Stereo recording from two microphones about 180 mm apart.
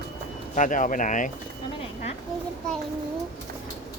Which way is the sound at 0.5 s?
45° left (ahead or behind).